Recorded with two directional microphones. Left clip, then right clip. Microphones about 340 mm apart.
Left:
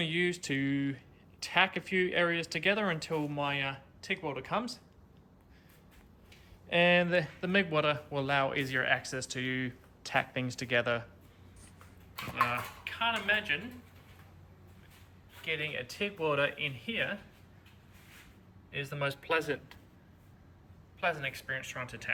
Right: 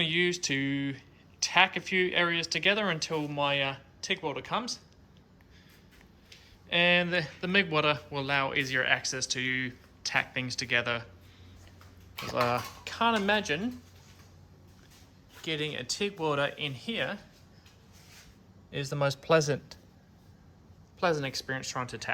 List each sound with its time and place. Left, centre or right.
0.0 s speech: centre
6.7 s speech: centre
12.5 s speech: centre
15.4 s speech: centre
18.8 s speech: centre
21.0 s speech: centre